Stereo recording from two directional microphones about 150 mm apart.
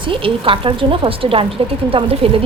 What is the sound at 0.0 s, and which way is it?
Speech, 35° right (ahead or behind).